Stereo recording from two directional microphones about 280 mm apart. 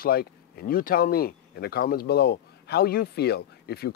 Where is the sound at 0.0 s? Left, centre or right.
Left.